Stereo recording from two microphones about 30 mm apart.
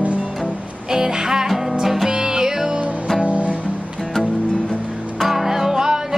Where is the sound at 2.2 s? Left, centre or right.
Centre.